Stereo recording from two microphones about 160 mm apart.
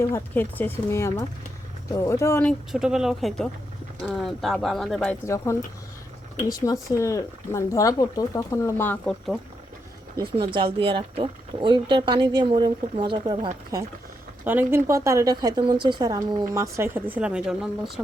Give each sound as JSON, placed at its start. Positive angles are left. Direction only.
{"t": 0.0, "sound": "speech", "side_deg": 15}
{"t": 2.5, "sound": "speech", "side_deg": -5}
{"t": 5.2, "sound": "speech", "side_deg": 20}
{"t": 6.8, "sound": "speech", "side_deg": 20}
{"t": 10.2, "sound": "speech", "side_deg": -35}
{"t": 14.4, "sound": "speech", "side_deg": -10}